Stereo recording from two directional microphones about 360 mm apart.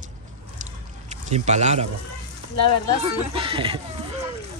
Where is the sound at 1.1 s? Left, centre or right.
Centre.